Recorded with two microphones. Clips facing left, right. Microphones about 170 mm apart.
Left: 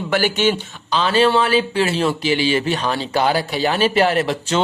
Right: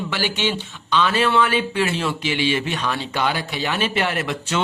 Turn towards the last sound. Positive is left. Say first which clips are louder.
# left 5 dB
turn(degrees=30)  # may be behind; listen again after turning